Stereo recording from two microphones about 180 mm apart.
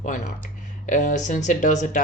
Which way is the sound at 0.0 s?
45° left (ahead or behind).